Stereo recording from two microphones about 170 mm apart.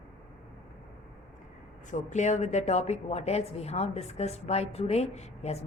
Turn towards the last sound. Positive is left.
turn(degrees=40)  # may be behind; listen again after turning